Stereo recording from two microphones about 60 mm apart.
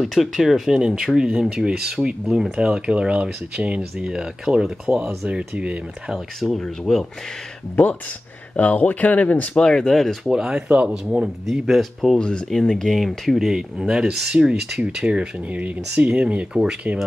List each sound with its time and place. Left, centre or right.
0.0 s speech: centre
2.5 s speech: centre
6.1 s speech: centre
7.7 s speech: left
9.6 s speech: centre
10.3 s speech: centre
11.4 s speech: centre
12.2 s speech: centre